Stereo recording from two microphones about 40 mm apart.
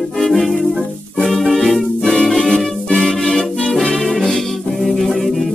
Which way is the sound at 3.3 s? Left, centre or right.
Centre.